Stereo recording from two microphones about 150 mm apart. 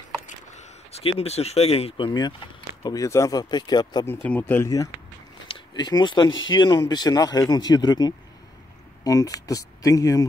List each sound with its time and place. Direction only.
0.3 s speech: 50° left (ahead or behind); by 4.0 s 30° left (ahead or behind)
4.0 s speech: 10° left (ahead or behind)
5.5 s speech: 30° left (ahead or behind)